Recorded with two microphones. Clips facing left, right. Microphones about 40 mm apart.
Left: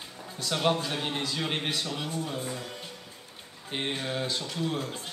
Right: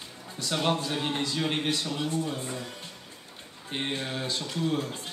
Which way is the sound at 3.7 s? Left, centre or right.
Centre.